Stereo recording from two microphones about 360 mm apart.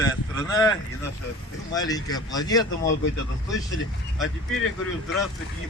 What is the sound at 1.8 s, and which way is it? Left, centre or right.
Speech, centre.